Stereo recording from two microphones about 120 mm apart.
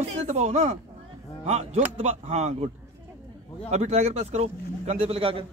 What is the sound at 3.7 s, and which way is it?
Speech, 65° right (ahead or behind).